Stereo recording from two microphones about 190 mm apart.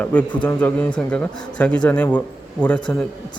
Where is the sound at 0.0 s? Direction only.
5° left (ahead or behind).